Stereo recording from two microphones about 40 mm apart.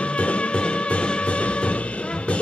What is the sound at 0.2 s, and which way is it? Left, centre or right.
Music, left.